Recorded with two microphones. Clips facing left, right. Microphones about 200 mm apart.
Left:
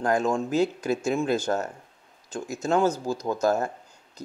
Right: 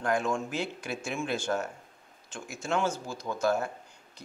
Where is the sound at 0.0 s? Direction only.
40° left (ahead or behind).